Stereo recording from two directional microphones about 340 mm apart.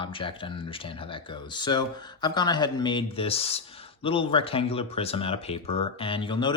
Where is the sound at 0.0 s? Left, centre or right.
Centre.